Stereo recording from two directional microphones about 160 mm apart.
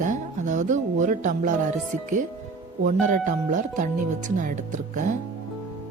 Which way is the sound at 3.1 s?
50° right (ahead or behind).